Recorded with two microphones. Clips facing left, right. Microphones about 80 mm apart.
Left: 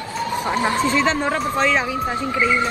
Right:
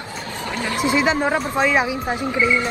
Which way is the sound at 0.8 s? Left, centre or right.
Centre.